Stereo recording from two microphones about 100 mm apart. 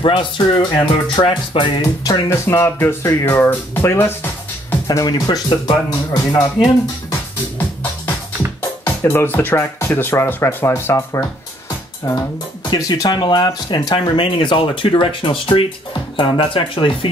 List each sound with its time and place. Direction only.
0.0 s speech: 55° left (ahead or behind)
1.8 s speech: 45° left (ahead or behind)
2.2 s speech: 25° left (ahead or behind)
4.8 s speech: 35° left (ahead or behind)
8.8 s speech: 25° left (ahead or behind)
12.0 s speech: 40° left (ahead or behind); by 17.1 s 55° left (ahead or behind)